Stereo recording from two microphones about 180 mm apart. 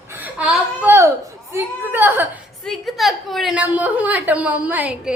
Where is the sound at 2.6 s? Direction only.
Centre (ahead or behind).